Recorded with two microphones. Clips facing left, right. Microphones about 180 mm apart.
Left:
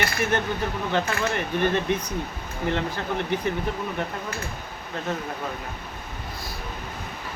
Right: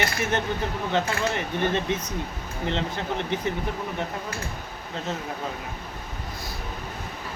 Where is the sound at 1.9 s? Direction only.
20° right (ahead or behind).